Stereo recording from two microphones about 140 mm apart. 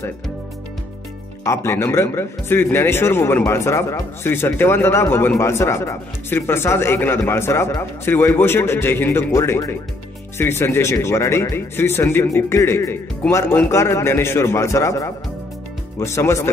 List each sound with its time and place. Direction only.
1.4 s a man's voice: 20° left (ahead or behind)